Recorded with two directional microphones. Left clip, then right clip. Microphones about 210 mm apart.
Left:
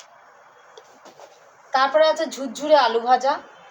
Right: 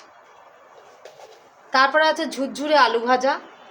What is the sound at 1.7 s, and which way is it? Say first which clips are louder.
A woman's voice: even; 15° right (ahead or behind).